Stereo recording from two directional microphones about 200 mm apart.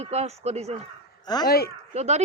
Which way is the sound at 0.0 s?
30° right (ahead or behind).